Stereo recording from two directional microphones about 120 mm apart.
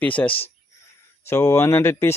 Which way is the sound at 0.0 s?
10° left (ahead or behind).